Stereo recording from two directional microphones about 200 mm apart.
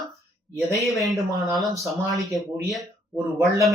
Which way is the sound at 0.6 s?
15° right (ahead or behind).